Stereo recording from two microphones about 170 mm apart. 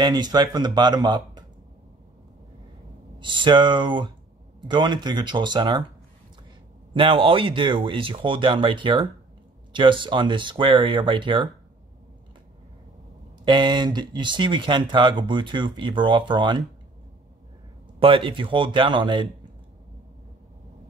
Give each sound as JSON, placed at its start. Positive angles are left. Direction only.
{"t": 0.0, "sound": "speech", "side_deg": -25}
{"t": 3.2, "sound": "speech", "side_deg": -30}
{"t": 6.9, "sound": "speech", "side_deg": -30}
{"t": 13.5, "sound": "speech", "side_deg": -25}
{"t": 17.9, "sound": "speech", "side_deg": -30}